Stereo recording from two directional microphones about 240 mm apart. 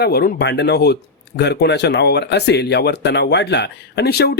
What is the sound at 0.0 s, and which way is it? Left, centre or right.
Speech, left.